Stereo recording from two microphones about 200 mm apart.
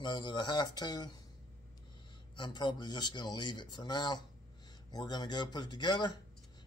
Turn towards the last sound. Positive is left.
turn(degrees=20)  # may be behind; listen again after turning